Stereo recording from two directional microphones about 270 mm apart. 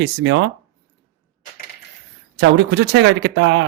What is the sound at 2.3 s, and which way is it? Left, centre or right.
Speech, right.